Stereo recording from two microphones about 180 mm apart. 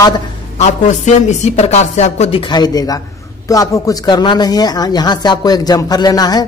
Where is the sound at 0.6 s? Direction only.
40° left (ahead or behind).